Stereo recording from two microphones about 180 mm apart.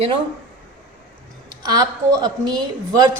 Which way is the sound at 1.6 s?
20° right (ahead or behind).